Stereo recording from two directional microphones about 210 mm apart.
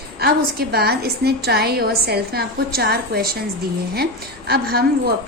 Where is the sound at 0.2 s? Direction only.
50° right (ahead or behind).